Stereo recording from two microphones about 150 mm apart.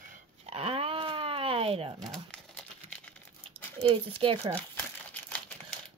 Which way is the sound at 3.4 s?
40° right (ahead or behind).